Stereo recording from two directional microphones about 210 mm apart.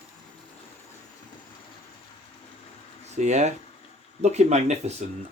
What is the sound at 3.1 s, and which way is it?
Speech, 35° right (ahead or behind).